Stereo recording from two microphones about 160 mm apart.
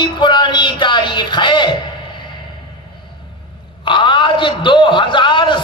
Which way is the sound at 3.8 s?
30° left (ahead or behind).